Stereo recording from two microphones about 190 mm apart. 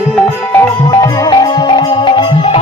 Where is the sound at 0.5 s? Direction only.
20° left (ahead or behind).